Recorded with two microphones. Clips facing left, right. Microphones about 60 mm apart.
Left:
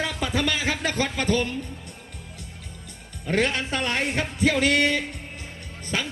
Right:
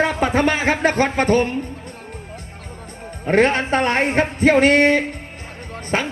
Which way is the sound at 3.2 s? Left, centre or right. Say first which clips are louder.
Right 8 dB; right.